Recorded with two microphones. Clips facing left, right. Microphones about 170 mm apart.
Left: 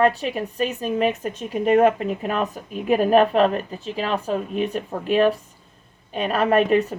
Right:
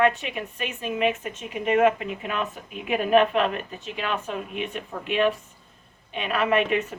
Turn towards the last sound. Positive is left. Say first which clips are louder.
# left 5 dB
turn(degrees=40)  # may be behind; listen again after turning